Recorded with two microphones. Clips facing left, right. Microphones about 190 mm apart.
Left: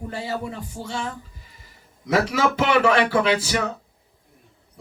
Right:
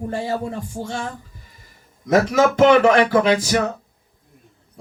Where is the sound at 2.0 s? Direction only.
45° right (ahead or behind).